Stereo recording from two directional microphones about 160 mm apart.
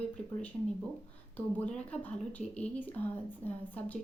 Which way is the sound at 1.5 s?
10° left (ahead or behind).